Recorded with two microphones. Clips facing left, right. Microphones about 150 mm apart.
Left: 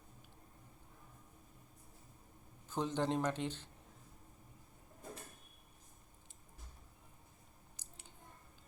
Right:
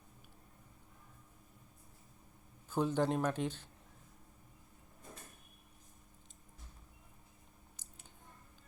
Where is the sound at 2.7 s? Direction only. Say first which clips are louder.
Right 3 dB; 10° right (ahead or behind).